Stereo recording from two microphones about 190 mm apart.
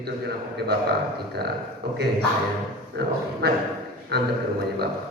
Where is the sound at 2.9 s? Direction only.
60° right (ahead or behind).